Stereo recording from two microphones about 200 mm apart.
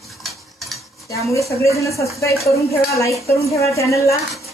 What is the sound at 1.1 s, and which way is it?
A woman's voice, 15° left (ahead or behind).